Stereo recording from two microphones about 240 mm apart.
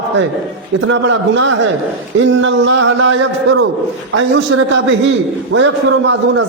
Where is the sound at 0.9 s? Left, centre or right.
Right.